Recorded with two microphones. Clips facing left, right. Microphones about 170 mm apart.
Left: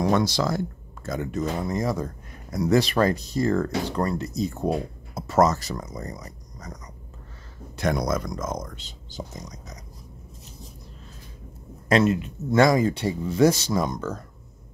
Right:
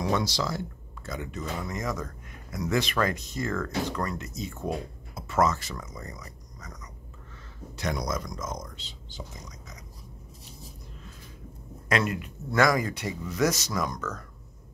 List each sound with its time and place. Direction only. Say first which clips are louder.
0.0 s speech: left 6 dB; 55° left (ahead or behind); by 6.8 s 35° left (ahead or behind)
7.7 s speech: left 6 dB; 55° left (ahead or behind)
11.9 s speech: left 7 dB; 25° left (ahead or behind)